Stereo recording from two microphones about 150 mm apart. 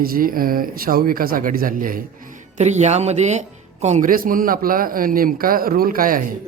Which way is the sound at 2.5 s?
50° right (ahead or behind).